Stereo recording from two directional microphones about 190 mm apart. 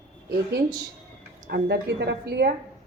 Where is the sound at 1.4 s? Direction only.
60° right (ahead or behind).